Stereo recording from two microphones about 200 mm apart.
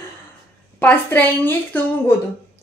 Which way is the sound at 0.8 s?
10° left (ahead or behind).